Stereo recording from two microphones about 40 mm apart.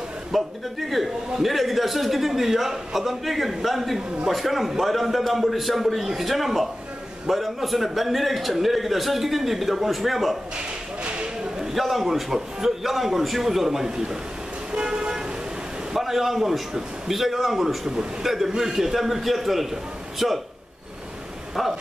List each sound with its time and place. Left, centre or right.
0.3 s a man's voice: centre
11.7 s a man's voice: centre
14.7 s vehicle: right
15.9 s a man's voice: centre